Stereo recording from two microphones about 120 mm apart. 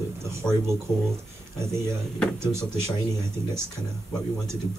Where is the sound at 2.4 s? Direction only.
20° right (ahead or behind).